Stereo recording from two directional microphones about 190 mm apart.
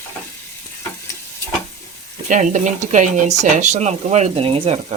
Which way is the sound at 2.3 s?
40° right (ahead or behind).